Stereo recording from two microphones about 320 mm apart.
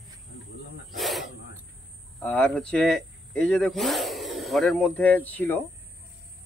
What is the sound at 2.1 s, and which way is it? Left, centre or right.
Speech, centre.